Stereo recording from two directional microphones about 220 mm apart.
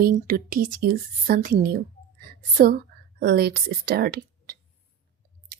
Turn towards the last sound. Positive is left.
turn(degrees=-45)  # may be behind; listen again after turning